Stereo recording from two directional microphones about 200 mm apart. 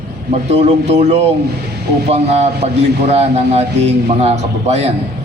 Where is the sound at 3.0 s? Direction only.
30° right (ahead or behind).